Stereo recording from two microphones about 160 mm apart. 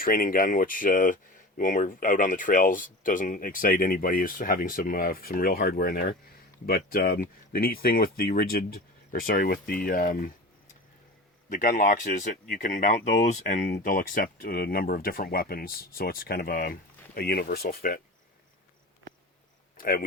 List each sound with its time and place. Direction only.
0.0 s speech: 65° left (ahead or behind)
11.5 s speech: 55° left (ahead or behind)
13.7 s speech: 70° left (ahead or behind)
19.7 s speech: 65° left (ahead or behind)